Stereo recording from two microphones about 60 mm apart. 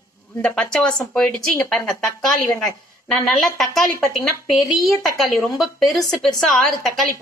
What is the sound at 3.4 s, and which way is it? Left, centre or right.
Speech, centre.